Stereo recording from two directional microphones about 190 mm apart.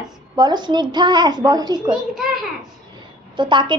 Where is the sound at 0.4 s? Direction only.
25° right (ahead or behind).